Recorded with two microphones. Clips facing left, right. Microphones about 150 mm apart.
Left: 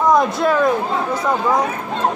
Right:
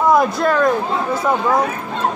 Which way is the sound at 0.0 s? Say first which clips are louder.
Right 1 dB; 5° right (ahead or behind).